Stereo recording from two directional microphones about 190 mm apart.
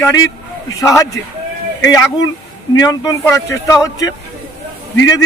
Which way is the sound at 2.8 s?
20° left (ahead or behind).